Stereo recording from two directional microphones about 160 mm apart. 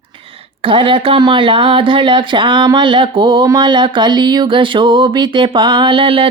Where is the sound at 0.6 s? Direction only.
35° right (ahead or behind).